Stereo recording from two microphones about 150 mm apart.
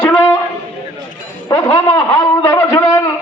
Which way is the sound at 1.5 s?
25° left (ahead or behind).